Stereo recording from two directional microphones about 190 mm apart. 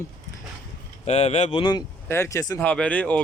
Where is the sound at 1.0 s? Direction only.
35° left (ahead or behind).